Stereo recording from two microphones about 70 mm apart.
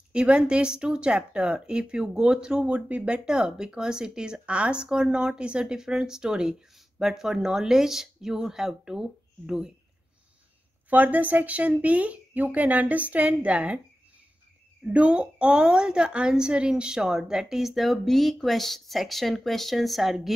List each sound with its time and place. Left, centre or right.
0.1 s speech: centre
10.9 s speech: right
14.9 s speech: centre